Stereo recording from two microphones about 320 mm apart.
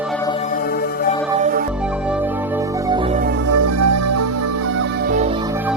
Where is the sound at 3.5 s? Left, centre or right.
Right.